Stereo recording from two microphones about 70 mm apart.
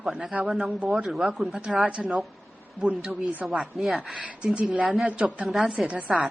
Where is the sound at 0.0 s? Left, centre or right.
Centre.